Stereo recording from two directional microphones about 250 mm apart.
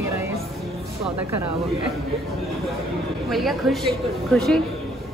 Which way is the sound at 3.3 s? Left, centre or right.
Centre.